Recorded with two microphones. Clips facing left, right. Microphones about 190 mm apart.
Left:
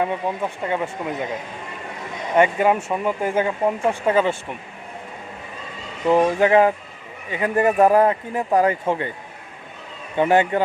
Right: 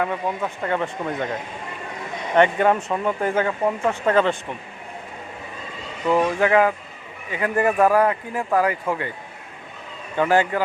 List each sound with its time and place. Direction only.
0.0 s speech: 15° left (ahead or behind)
2.3 s speech: 10° left (ahead or behind)
6.1 s speech: 20° left (ahead or behind)
10.2 s speech: 20° left (ahead or behind)